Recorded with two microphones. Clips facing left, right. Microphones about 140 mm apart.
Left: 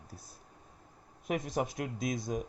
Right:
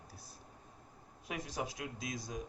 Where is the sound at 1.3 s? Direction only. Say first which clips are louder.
Left 8 dB; 55° left (ahead or behind).